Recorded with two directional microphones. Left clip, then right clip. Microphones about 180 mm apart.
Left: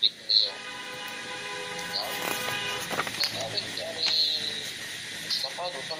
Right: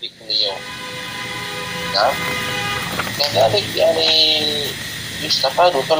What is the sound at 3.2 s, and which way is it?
Speech, 50° right (ahead or behind).